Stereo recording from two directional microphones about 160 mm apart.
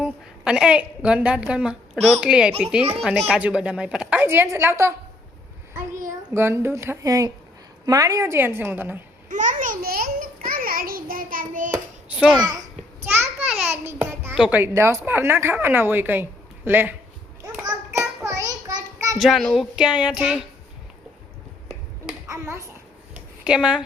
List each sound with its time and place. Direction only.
0.0 s a woman's voice: 5° right (ahead or behind)
6.1 s a child's voice: 15° right (ahead or behind)
9.3 s a child's voice: 50° right (ahead or behind)
11.7 s a child's voice: 10° right (ahead or behind)
13.1 s a sound: 5° right (ahead or behind)
13.8 s a woman's voice: 15° right (ahead or behind)
17.9 s child singing: 20° right (ahead or behind)
19.2 s speech: centre (ahead or behind)
22.3 s a child's voice: 20° right (ahead or behind)
23.1 s a sound: 5° right (ahead or behind)